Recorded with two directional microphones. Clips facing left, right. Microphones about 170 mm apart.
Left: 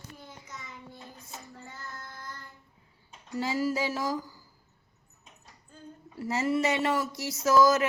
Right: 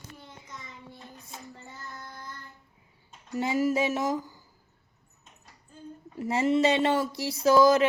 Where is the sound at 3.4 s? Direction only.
20° right (ahead or behind).